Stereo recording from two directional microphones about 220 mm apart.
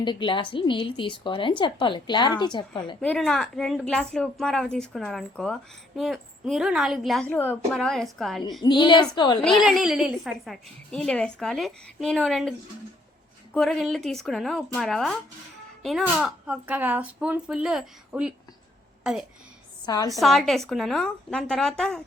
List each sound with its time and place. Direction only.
0.0 s a woman's voice: 20° left (ahead or behind)
3.0 s a woman's voice: 5° left (ahead or behind)
8.6 s a woman's voice: 20° left (ahead or behind)
9.4 s a woman's voice: centre (ahead or behind)
19.8 s a woman's voice: 20° left (ahead or behind)
20.1 s a woman's voice: centre (ahead or behind)